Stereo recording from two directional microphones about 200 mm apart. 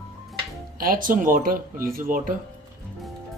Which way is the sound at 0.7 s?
45° right (ahead or behind).